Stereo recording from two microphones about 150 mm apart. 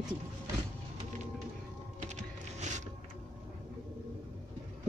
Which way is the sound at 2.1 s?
55° right (ahead or behind).